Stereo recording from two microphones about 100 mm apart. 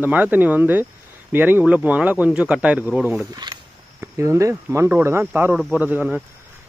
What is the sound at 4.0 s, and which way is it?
Speech, 30° right (ahead or behind).